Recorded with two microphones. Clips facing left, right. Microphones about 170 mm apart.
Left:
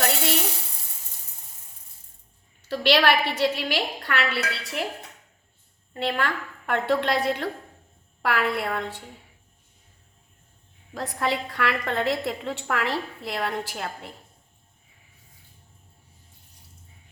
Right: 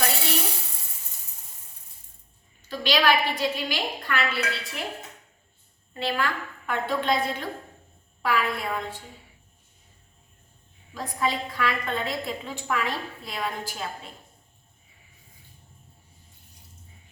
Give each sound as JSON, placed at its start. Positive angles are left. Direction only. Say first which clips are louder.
{"t": 2.6, "sound": "a woman's voice", "louder": "left 4 dB", "side_deg": 70}
{"t": 5.9, "sound": "a woman's voice", "louder": "left 1 dB", "side_deg": 65}
{"t": 10.9, "sound": "a woman's voice", "louder": "left 1 dB", "side_deg": 70}